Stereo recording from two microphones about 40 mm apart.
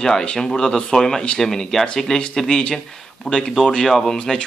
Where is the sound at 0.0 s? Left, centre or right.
Centre.